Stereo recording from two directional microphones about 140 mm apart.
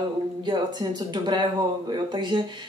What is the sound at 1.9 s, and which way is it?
Speech, 35° right (ahead or behind).